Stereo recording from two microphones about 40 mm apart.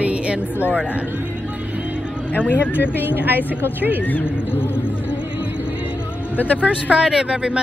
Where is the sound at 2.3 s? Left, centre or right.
Left.